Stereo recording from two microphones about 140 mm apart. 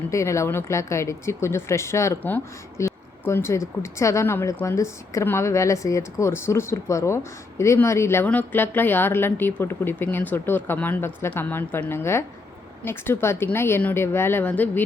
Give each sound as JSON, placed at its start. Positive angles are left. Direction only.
{"t": 0.1, "sound": "a woman's voice", "side_deg": 20}